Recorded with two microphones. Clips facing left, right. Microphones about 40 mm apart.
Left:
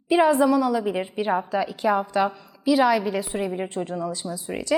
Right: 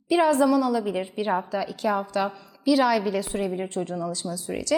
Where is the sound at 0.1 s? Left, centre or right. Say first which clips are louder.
Left 2 dB; centre.